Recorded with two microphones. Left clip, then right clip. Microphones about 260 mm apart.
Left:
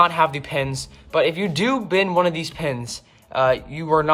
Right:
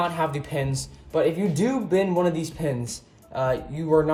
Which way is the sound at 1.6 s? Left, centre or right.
Left.